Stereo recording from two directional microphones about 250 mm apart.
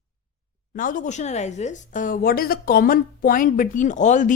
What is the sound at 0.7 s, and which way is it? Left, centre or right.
A woman's voice, left.